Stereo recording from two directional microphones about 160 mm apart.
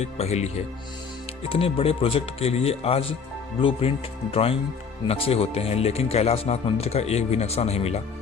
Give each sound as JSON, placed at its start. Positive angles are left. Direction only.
{"t": 0.0, "sound": "speech", "side_deg": 45}